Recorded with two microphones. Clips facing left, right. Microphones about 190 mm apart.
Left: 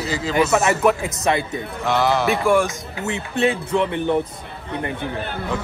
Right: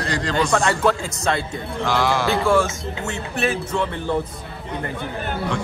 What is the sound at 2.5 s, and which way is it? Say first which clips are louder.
Speech: left 1 dB; 15° left (ahead or behind).